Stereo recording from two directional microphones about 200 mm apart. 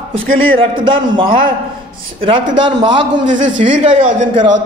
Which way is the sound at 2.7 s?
20° right (ahead or behind).